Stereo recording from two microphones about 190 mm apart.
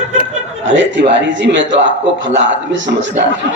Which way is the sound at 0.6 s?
75° right (ahead or behind).